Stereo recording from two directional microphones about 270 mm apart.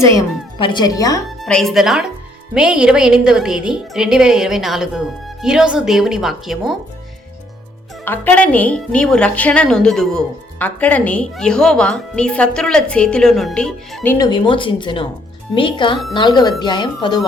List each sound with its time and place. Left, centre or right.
0.0 s speech: centre
1.4 s a woman's voice: centre
8.0 s a woman's voice: centre